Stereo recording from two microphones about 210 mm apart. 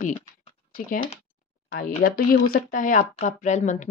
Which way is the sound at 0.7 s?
40° left (ahead or behind).